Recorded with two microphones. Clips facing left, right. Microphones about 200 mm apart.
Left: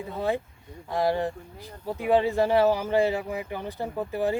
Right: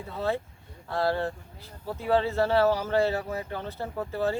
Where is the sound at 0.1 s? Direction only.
15° left (ahead or behind).